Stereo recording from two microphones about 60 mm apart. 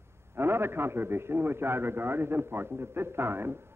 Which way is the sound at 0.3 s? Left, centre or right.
Right.